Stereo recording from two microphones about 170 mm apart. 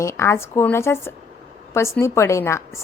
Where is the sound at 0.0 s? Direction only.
15° left (ahead or behind).